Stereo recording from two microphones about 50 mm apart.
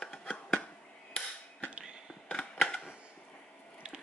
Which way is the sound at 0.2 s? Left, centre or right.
Left.